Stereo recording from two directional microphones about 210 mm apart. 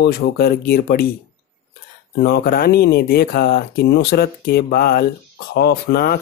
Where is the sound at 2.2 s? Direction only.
50° left (ahead or behind).